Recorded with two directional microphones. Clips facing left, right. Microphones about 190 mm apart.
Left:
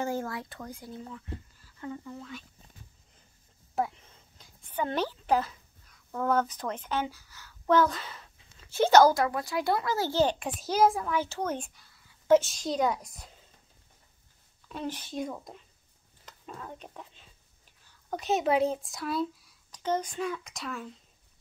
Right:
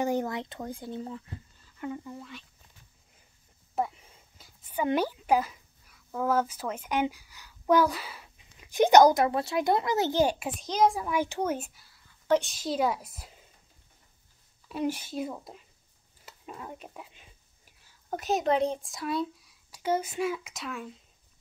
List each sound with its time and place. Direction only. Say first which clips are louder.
0.0 s speech: right 4 dB; 20° right (ahead or behind)
1.8 s speech: right 2 dB; 15° right (ahead or behind)
2.1 s a woman's voice: left 1 dB; centre (ahead or behind)
3.7 s speech: even; 5° right (ahead or behind)
10.6 s a woman's voice: left 1 dB; 5° left (ahead or behind)
11.1 s a woman's voice: right 2 dB; 15° right (ahead or behind)
14.7 s a woman's voice: right 5 dB; 10° right (ahead or behind)
18.1 s speech: even; centre (ahead or behind)